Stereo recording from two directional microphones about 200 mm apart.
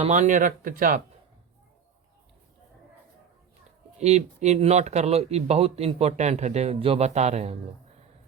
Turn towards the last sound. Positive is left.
turn(degrees=-35)  # may be behind; listen again after turning